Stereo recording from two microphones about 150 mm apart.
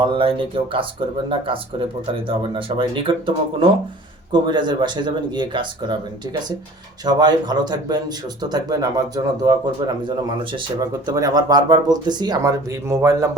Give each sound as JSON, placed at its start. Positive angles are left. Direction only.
{"t": 0.0, "sound": "speech", "side_deg": -35}
{"t": 2.6, "sound": "speech", "side_deg": -35}
{"t": 7.0, "sound": "speech", "side_deg": -30}